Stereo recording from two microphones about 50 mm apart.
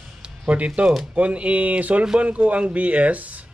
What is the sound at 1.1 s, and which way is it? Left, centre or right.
A man's voice, right.